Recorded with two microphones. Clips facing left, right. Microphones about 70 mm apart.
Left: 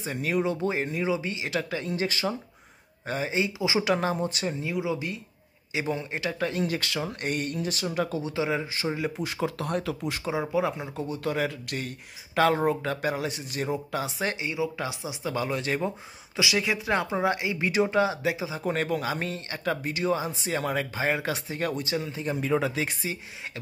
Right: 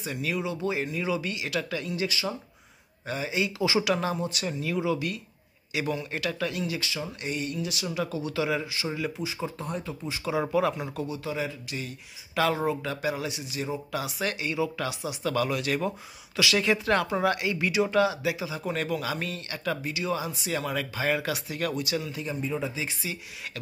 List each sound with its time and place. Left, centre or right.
0.0 s speech: left
3.8 s speech: left
8.2 s speech: left
9.2 s speech: left
10.5 s speech: centre
11.2 s a man's voice: left
12.4 s speech: left
16.3 s speech: centre
17.0 s speech: left
18.6 s speech: left
22.4 s speech: left
23.1 s speech: left